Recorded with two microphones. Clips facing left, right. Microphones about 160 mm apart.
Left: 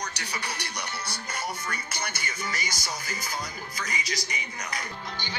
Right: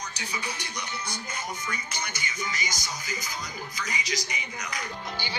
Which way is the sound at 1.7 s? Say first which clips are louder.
Even; 60° left (ahead or behind).